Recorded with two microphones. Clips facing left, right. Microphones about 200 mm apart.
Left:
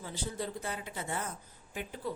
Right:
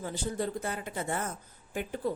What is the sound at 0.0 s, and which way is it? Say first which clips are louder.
Speech: right 5 dB; 50° right (ahead or behind).